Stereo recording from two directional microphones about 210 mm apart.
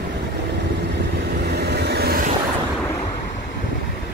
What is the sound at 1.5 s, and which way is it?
Vehicle, 50° right (ahead or behind).